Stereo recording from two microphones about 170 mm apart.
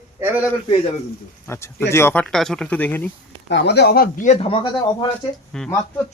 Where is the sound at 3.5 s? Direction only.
80° left; by 5.0 s 30° left (ahead or behind).